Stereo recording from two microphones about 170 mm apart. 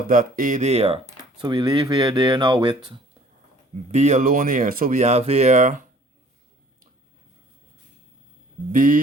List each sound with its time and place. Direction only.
0.1 s speech: 50° right (ahead or behind); by 3.0 s 30° right (ahead or behind)
3.9 s speech: 45° right (ahead or behind)
4.9 s speech: 40° right (ahead or behind)
8.7 s speech: 50° right (ahead or behind)